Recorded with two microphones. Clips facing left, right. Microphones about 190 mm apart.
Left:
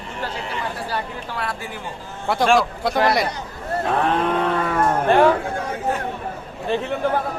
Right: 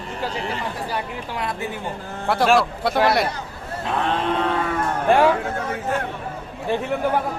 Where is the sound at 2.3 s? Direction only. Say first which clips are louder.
Even; centre (ahead or behind).